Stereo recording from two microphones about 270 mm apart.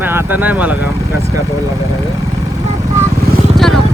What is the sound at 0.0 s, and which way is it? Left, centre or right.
Speech, centre.